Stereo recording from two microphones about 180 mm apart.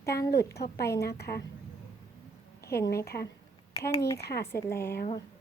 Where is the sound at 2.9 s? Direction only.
60° left (ahead or behind).